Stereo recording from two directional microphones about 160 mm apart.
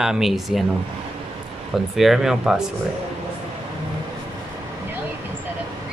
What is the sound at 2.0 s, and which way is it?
Speech, centre (ahead or behind).